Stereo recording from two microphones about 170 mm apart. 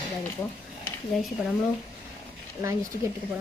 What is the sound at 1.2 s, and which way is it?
Speech, centre (ahead or behind).